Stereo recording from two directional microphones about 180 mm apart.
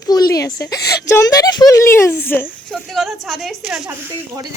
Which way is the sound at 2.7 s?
Centre (ahead or behind).